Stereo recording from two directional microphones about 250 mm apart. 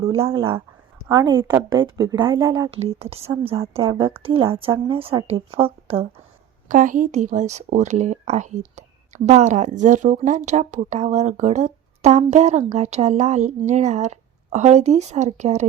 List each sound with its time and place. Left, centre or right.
0.0 s speech: right